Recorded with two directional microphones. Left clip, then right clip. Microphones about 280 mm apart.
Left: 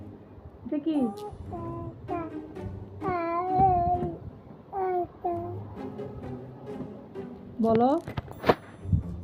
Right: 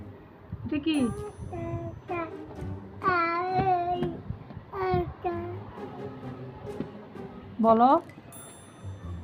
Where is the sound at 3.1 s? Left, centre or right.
Centre.